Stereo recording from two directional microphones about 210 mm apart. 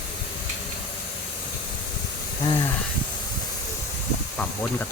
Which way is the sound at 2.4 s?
20° left (ahead or behind).